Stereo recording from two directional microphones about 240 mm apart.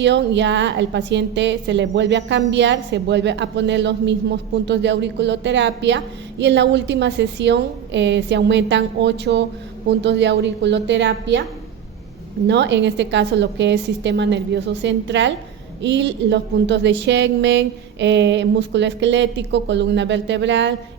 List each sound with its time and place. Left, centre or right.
0.0 s a woman's voice: right
12.5 s a woman's voice: right